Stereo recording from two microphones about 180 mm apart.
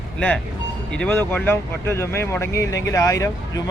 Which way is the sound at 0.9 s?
10° left (ahead or behind).